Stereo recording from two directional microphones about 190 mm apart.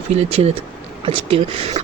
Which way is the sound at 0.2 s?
35° right (ahead or behind).